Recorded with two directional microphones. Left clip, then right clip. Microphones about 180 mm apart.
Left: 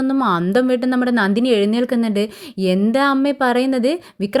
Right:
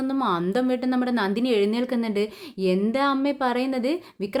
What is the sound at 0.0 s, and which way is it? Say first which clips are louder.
A woman's voice: left 6 dB; 30° left (ahead or behind).